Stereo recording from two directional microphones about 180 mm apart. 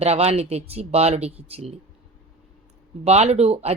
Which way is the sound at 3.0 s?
35° right (ahead or behind).